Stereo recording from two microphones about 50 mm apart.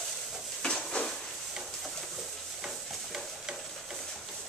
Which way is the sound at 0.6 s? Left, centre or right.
Centre.